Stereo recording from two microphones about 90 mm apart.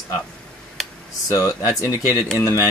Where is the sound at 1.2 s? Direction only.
35° left (ahead or behind).